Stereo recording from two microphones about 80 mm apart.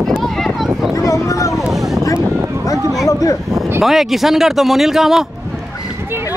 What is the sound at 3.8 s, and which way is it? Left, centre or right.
Speech, centre.